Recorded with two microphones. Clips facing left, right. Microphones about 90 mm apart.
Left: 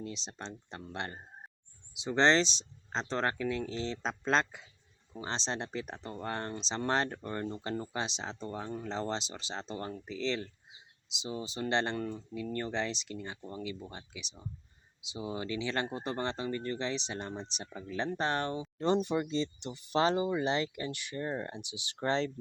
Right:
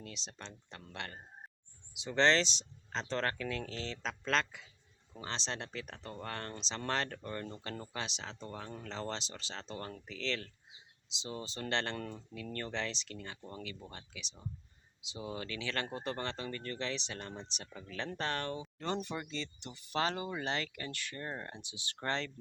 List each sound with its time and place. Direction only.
0.0 s speech: 25° left (ahead or behind)